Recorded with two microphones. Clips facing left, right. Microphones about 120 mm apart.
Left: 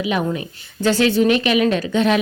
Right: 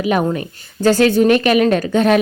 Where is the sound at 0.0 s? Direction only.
45° right (ahead or behind).